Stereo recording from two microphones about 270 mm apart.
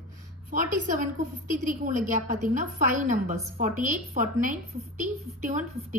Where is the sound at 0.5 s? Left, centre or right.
Right.